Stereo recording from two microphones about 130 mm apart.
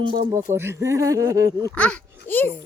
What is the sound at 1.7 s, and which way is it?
Speech, 10° left (ahead or behind).